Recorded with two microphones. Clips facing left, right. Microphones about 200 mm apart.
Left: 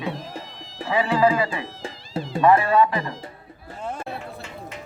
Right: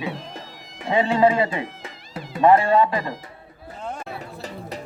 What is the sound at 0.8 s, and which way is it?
Speech, 25° right (ahead or behind).